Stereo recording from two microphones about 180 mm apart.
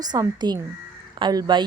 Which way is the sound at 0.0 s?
20° right (ahead or behind).